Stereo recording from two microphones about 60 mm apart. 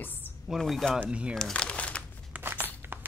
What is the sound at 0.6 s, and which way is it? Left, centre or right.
Speech, centre.